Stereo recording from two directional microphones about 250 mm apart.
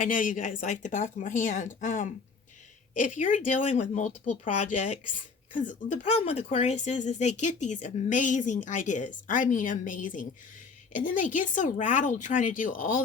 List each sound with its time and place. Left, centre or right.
0.0 s speech: left